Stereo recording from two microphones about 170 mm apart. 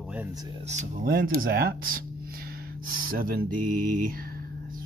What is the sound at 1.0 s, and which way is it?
Speech, 60° right (ahead or behind).